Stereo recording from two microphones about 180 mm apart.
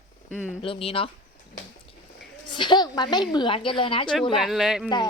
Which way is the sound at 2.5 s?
25° left (ahead or behind).